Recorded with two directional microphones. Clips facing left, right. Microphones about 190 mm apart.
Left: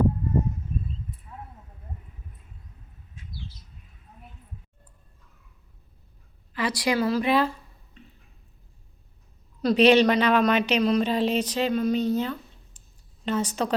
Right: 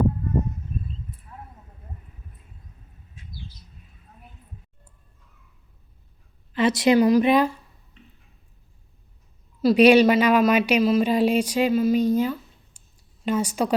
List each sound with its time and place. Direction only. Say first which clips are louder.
6.5 s a woman's voice: right 7 dB; 25° right (ahead or behind)
9.6 s speech: right 3 dB; 10° right (ahead or behind)